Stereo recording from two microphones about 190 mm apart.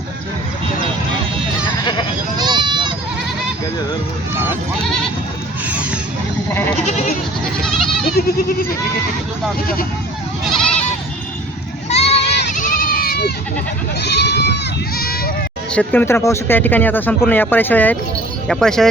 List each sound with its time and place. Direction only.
1.8 s goat: 25° left (ahead or behind)
2.4 s goat: 20° right (ahead or behind)
5.6 s music: 5° right (ahead or behind)
6.5 s goat: 15° left (ahead or behind)
6.7 s goat: 35° left (ahead or behind)
7.6 s goat: centre (ahead or behind)
8.1 s goat: 50° left (ahead or behind)
10.5 s goat: 5° left (ahead or behind)
11.9 s goat: 35° left (ahead or behind)
12.2 s goat: 65° left (ahead or behind)
12.5 s goat: 45° left (ahead or behind)
14.0 s speech: 60° left (ahead or behind)
15.7 s speech: 5° left (ahead or behind)